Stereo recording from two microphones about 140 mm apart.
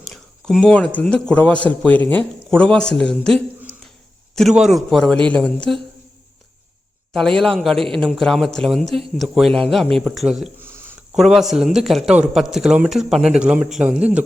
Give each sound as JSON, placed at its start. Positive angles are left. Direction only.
{"t": 0.0, "sound": "a man's voice", "side_deg": 0}
{"t": 7.1, "sound": "a man's voice", "side_deg": 5}
{"t": 10.6, "sound": "a sound", "side_deg": -15}
{"t": 11.1, "sound": "a man's voice", "side_deg": 0}